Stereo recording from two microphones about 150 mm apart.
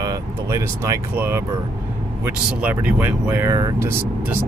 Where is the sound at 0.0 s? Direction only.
20° right (ahead or behind).